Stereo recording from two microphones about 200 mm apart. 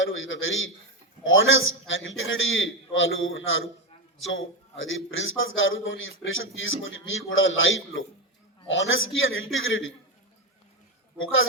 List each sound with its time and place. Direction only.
0.0 s a man's voice: 75° left (ahead or behind)
11.2 s a woman's voice: 90° left